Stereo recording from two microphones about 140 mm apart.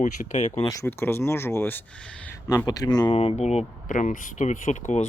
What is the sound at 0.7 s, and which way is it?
Speech, 20° left (ahead or behind).